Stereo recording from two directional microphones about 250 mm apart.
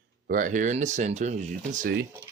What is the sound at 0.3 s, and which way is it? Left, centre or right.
Speech, right.